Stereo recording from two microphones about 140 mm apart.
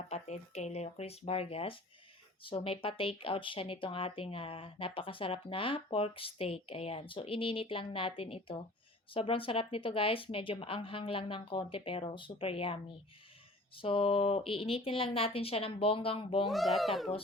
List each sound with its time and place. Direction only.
0.1 s speech: 55° left (ahead or behind)
16.5 s a child's voice: centre (ahead or behind)